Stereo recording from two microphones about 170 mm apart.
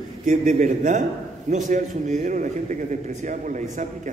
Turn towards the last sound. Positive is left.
turn(degrees=-50)  # may be behind; listen again after turning